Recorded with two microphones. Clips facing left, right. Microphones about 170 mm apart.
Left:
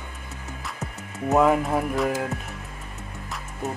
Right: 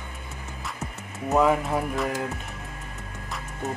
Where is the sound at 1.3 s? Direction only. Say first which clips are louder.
Left 2 dB; 5° left (ahead or behind).